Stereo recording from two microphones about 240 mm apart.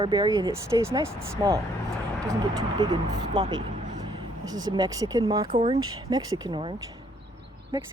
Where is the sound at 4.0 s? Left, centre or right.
Centre.